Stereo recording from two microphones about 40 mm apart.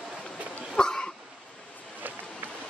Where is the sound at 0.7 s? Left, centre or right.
Left.